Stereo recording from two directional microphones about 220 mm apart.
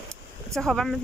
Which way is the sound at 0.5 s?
Centre (ahead or behind).